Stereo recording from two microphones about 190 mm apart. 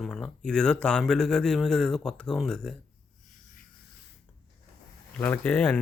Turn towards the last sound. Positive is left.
turn(degrees=10)  # may be behind; listen again after turning